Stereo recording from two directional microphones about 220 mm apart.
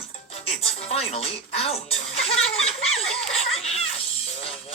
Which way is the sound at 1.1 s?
30° left (ahead or behind).